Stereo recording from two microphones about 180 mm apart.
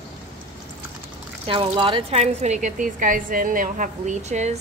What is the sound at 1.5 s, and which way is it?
A woman's voice, 30° right (ahead or behind).